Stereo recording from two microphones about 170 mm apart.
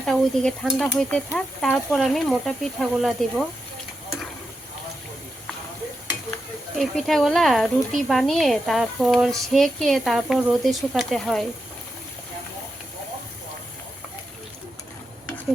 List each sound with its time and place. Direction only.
0.0 s speech: 5° left (ahead or behind)
6.7 s speech: centre (ahead or behind)